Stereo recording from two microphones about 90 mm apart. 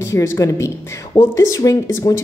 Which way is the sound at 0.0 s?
30° left (ahead or behind).